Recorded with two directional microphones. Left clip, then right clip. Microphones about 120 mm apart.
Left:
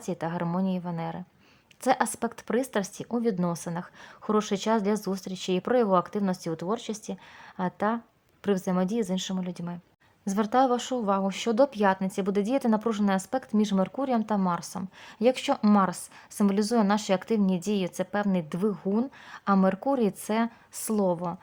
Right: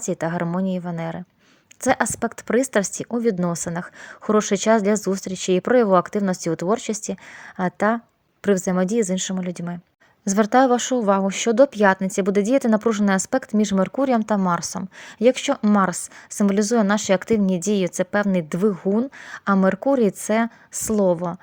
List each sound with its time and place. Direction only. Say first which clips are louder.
0.0 s speech: right 7 dB; 40° right (ahead or behind)
14.8 s speech: right 7 dB; 30° right (ahead or behind)